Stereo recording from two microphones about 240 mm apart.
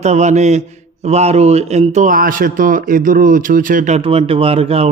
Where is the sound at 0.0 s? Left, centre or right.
Right.